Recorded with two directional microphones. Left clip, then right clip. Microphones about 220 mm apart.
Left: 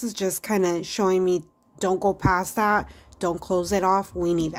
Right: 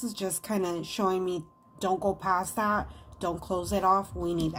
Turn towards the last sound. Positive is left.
turn(degrees=45)  # may be behind; listen again after turning